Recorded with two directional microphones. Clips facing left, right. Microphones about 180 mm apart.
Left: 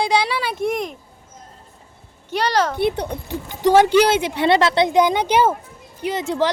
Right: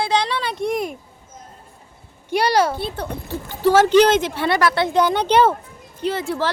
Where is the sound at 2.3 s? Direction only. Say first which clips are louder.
Right 2 dB; 10° right (ahead or behind).